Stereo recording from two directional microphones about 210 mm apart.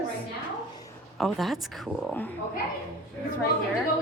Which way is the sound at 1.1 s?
Centre (ahead or behind).